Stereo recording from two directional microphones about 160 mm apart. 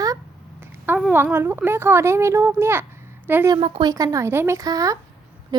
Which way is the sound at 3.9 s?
20° right (ahead or behind).